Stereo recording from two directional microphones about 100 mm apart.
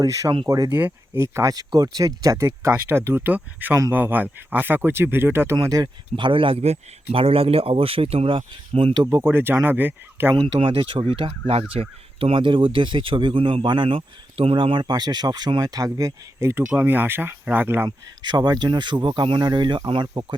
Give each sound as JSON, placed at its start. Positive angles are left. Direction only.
{"t": 0.0, "sound": "speech", "side_deg": -35}
{"t": 0.7, "sound": "speech", "side_deg": -20}
{"t": 5.5, "sound": "speech", "side_deg": -40}
{"t": 6.1, "sound": "speech", "side_deg": -55}
{"t": 9.0, "sound": "speech", "side_deg": -25}
{"t": 10.3, "sound": "speech", "side_deg": -60}
{"t": 17.8, "sound": "speech", "side_deg": -45}